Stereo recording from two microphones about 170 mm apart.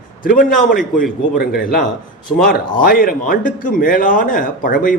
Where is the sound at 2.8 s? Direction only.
55° left (ahead or behind).